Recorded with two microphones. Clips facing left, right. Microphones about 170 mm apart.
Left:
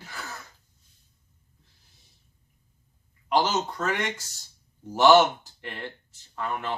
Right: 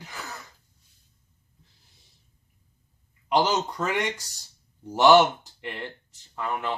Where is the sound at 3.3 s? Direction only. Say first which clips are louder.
Right 1 dB; 15° right (ahead or behind).